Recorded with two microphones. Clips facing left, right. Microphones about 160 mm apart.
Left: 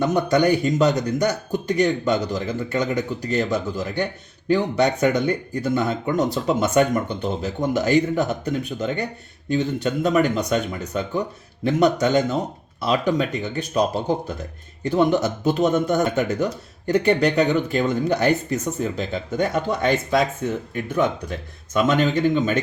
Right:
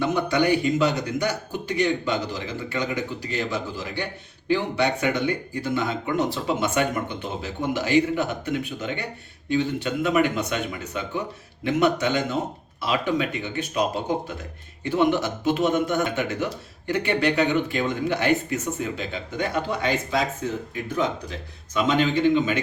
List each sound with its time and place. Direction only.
0.0 s speech: 45° left (ahead or behind)
14.8 s speech: 40° left (ahead or behind)